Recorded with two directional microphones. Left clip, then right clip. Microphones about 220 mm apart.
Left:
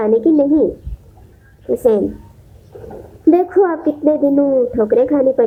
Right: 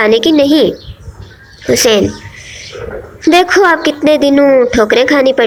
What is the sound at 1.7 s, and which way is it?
Speech, 20° right (ahead or behind).